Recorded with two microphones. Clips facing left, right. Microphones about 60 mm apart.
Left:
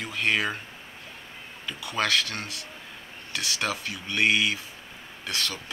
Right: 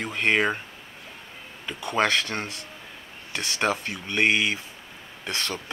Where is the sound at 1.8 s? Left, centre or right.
Right.